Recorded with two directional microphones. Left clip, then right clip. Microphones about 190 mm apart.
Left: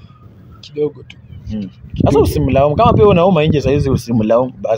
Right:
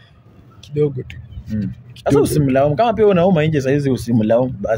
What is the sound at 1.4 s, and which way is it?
Speech, 40° right (ahead or behind).